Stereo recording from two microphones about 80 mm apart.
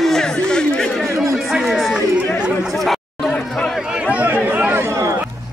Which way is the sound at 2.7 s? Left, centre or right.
Centre.